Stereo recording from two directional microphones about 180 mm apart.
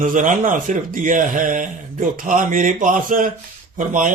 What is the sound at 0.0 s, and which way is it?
A man's voice, 50° right (ahead or behind).